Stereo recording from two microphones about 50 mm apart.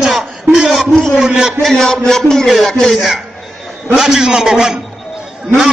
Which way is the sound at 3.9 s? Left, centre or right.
Centre.